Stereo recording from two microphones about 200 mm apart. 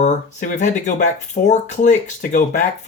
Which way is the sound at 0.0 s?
40° left (ahead or behind).